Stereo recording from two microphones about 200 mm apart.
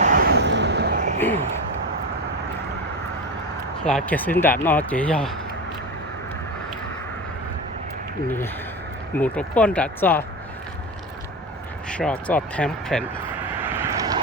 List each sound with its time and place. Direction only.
0.0 s vehicle: 45° right (ahead or behind)
3.8 s speech: 5° left (ahead or behind)
9.1 s speech: 5° left (ahead or behind)
11.9 s speech: 5° left (ahead or behind)
13.6 s vehicle: 10° right (ahead or behind)